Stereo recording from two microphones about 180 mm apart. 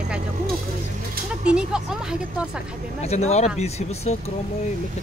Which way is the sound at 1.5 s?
5° right (ahead or behind).